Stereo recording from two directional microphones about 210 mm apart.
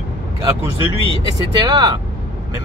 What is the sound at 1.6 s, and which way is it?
Speech, 20° right (ahead or behind).